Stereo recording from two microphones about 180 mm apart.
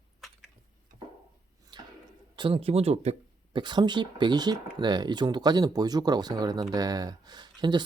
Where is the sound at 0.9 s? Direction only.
50° right (ahead or behind).